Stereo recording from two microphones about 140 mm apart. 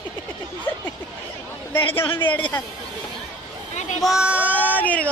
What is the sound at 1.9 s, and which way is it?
Speech, 40° left (ahead or behind).